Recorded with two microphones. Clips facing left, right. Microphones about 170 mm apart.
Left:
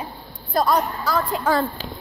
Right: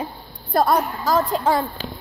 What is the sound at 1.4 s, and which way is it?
Speech, 20° right (ahead or behind).